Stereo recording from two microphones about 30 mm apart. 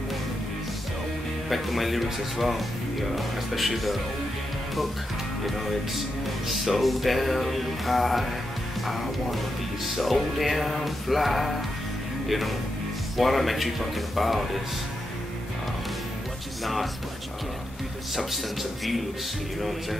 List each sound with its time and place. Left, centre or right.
1.5 s speech: centre
6.5 s speech: centre
16.6 s speech: centre
18.1 s speech: centre